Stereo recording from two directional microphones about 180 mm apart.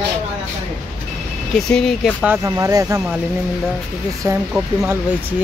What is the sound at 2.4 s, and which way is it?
Speech, 20° right (ahead or behind).